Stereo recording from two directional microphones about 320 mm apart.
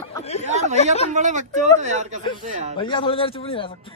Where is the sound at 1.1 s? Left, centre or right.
Right.